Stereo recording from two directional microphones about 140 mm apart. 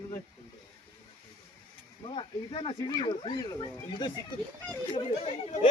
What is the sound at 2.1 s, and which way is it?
Speech, 35° left (ahead or behind).